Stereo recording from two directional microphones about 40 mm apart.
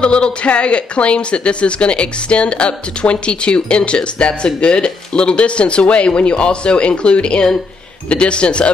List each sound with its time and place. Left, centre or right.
0.0 s speech: left